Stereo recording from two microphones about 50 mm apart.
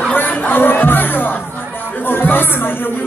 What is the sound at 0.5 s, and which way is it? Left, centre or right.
Music, left.